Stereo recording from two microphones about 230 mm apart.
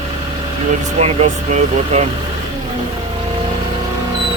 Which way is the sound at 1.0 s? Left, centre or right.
Right.